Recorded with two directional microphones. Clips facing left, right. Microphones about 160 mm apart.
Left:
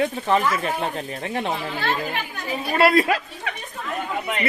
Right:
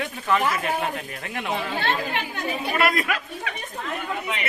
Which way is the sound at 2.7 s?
30° left (ahead or behind).